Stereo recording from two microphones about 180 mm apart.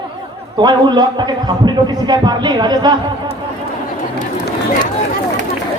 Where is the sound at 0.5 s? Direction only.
25° right (ahead or behind).